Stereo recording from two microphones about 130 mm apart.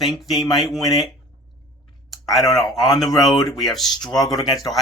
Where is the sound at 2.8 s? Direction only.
Centre (ahead or behind).